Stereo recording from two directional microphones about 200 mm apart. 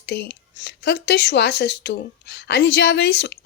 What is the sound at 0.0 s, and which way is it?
Speech, 55° left (ahead or behind).